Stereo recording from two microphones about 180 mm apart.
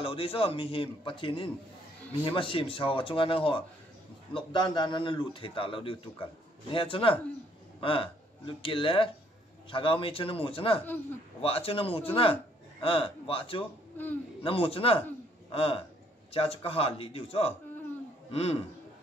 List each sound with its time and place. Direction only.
0.0 s a man's voice: 30° left (ahead or behind)